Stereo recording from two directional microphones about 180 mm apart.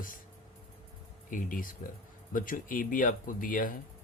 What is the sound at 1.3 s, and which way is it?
Speech, 50° left (ahead or behind).